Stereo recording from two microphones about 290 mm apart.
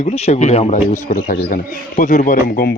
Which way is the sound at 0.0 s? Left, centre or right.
Left.